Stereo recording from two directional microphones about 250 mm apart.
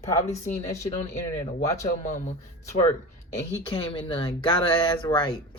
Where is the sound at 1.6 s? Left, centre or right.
Centre.